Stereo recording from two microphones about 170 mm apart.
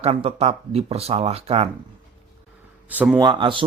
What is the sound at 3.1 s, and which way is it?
Speech, 25° right (ahead or behind).